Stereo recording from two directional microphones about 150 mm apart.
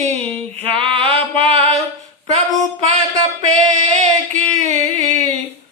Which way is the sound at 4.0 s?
50° right (ahead or behind).